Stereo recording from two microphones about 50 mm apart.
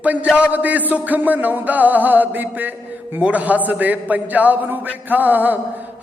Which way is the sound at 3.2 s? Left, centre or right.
Right.